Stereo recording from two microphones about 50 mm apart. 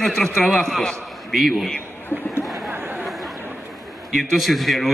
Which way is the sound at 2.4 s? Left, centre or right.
Centre.